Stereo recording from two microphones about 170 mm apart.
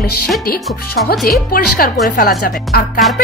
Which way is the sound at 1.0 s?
75° left (ahead or behind).